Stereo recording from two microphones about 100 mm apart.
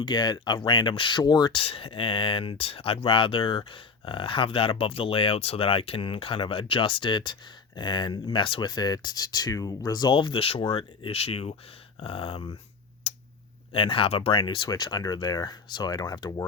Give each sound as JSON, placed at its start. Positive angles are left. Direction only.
{"t": 0.0, "sound": "speech", "side_deg": 50}
{"t": 1.6, "sound": "speech", "side_deg": 65}
{"t": 8.7, "sound": "speech", "side_deg": 45}
{"t": 11.9, "sound": "speech", "side_deg": 65}
{"t": 13.1, "sound": "a sound", "side_deg": 80}
{"t": 13.7, "sound": "speech", "side_deg": 65}